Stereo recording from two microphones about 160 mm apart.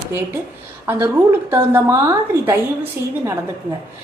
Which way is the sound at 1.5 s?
15° right (ahead or behind).